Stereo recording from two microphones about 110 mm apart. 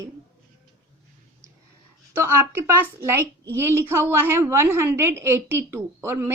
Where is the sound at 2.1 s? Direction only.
20° right (ahead or behind).